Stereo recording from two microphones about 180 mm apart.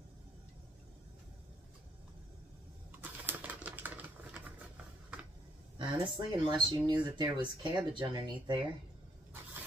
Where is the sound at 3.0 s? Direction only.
10° right (ahead or behind).